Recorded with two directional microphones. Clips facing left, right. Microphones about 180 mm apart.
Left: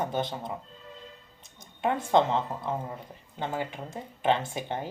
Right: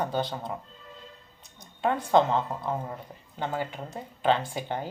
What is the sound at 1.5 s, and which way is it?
Speech, 20° left (ahead or behind).